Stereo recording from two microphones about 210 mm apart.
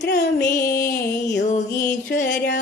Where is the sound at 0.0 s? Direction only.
55° left (ahead or behind).